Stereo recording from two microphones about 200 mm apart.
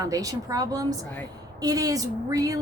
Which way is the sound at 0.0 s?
15° right (ahead or behind).